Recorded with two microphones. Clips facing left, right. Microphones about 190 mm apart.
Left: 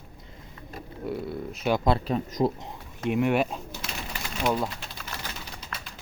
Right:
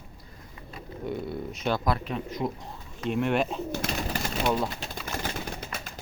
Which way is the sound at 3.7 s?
50° right (ahead or behind).